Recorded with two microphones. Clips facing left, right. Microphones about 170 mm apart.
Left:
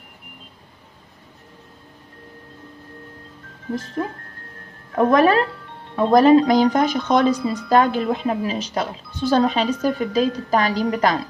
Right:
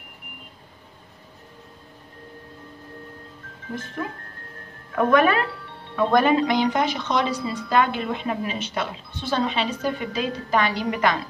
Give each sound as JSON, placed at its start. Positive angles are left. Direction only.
{"t": 3.7, "sound": "a woman's voice", "side_deg": 35}